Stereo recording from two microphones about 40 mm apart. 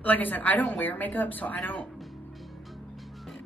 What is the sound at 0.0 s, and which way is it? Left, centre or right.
A woman's voice, left.